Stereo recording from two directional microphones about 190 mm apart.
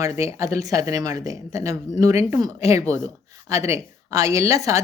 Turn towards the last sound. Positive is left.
turn(degrees=-15)  # may be behind; listen again after turning